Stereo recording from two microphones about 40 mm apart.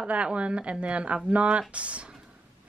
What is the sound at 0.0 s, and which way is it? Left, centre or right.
Speech, right.